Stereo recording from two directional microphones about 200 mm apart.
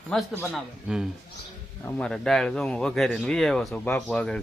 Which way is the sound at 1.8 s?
5° left (ahead or behind).